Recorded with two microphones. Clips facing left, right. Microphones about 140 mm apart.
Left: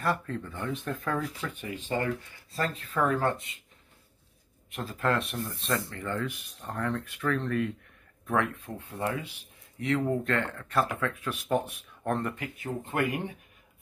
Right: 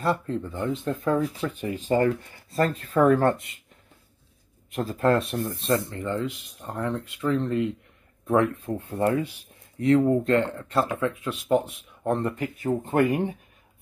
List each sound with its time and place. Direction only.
0.0 s speech: 30° right (ahead or behind); by 3.3 s 45° right (ahead or behind)
4.6 s speech: 40° right (ahead or behind)
5.6 s speech: 25° right (ahead or behind)
8.3 s speech: 35° right (ahead or behind)
12.6 s speech: 40° right (ahead or behind)